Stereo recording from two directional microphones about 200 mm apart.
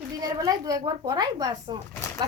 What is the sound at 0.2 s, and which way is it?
A woman's voice, 20° right (ahead or behind).